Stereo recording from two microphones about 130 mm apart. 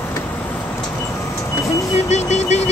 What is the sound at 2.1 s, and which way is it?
Vehicle, 60° left (ahead or behind).